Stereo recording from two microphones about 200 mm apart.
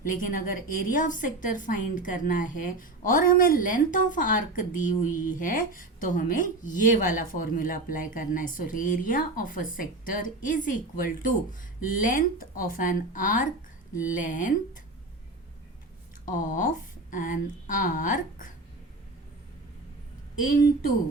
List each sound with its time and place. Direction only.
0.0 s a woman's voice: 45° left (ahead or behind)
16.2 s speech: 40° left (ahead or behind)
20.4 s a woman's voice: 45° left (ahead or behind)